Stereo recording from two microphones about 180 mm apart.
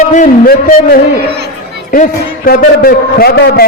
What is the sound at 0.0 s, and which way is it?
Speech, 45° left (ahead or behind).